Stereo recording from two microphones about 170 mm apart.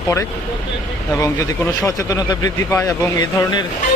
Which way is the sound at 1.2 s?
20° left (ahead or behind).